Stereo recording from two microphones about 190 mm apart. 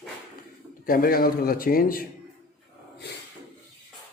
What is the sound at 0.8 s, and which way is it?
A man's voice, 50° left (ahead or behind).